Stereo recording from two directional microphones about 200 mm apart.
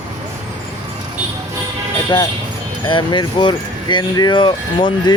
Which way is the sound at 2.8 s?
25° left (ahead or behind).